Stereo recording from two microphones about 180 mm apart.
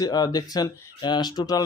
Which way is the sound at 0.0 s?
20° left (ahead or behind).